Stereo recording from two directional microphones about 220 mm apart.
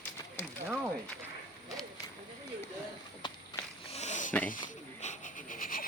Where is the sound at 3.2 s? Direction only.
25° left (ahead or behind).